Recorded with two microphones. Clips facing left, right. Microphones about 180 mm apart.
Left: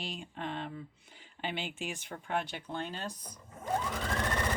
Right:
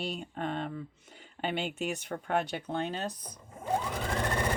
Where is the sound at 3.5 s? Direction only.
10° right (ahead or behind).